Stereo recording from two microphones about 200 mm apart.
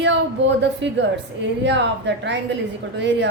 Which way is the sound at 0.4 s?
60° right (ahead or behind).